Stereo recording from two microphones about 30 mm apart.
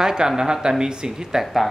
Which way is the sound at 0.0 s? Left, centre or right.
Right.